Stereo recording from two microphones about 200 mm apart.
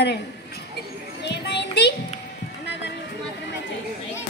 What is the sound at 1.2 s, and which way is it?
Children playing, 55° left (ahead or behind).